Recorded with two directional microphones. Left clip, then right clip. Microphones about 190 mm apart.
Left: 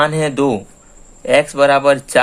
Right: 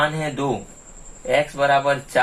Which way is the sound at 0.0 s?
60° left (ahead or behind).